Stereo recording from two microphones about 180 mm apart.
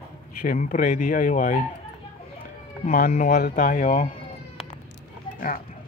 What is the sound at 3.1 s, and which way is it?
Speech, 50° left (ahead or behind).